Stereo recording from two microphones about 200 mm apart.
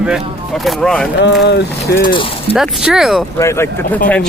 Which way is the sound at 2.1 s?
25° left (ahead or behind).